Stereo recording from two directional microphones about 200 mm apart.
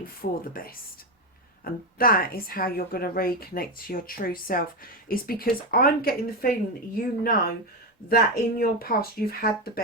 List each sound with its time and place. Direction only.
0.0 s a woman's voice: 45° left (ahead or behind)